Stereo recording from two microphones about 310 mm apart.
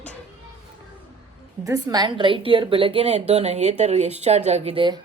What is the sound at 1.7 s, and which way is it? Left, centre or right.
A woman's voice, centre.